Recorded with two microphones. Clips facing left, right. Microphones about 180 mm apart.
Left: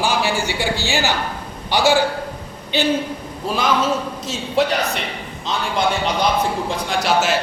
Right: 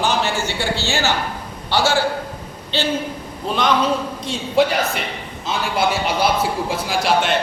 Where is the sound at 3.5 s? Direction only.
5° left (ahead or behind).